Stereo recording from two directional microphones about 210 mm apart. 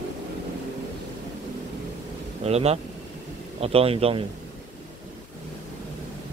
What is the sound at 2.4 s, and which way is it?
A man's voice, 30° right (ahead or behind).